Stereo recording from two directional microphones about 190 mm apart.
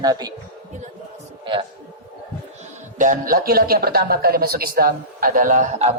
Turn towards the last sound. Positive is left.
turn(degrees=-40)  # may be behind; listen again after turning